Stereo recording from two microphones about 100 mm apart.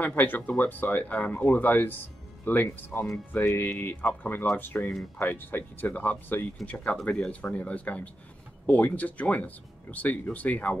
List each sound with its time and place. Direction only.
0.0 s speech: 20° left (ahead or behind)